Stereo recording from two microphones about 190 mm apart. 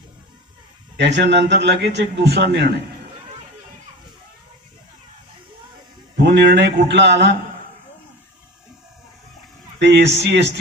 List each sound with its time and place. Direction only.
0.9 s a man's voice: 65° right (ahead or behind)
6.2 s a man's voice: 65° right (ahead or behind)
9.7 s speech: 65° right (ahead or behind)